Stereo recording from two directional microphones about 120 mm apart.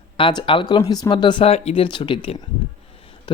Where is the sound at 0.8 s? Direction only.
30° left (ahead or behind).